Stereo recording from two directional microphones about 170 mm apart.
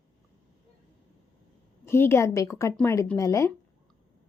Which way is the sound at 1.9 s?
15° left (ahead or behind).